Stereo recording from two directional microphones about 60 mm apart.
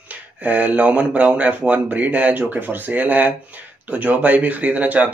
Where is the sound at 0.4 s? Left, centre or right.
Right.